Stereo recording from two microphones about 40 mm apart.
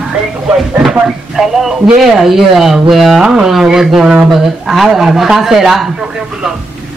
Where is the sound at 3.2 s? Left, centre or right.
Centre.